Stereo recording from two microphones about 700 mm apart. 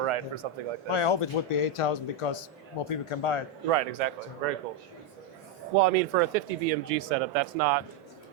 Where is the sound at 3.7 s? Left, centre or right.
Right.